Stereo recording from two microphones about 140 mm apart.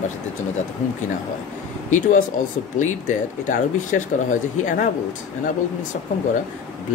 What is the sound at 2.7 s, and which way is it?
Speech, 65° left (ahead or behind).